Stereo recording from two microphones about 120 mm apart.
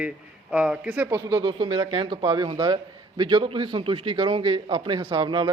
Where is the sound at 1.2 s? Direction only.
30° right (ahead or behind).